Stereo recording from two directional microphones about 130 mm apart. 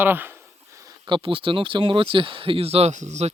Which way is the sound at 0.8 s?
35° right (ahead or behind).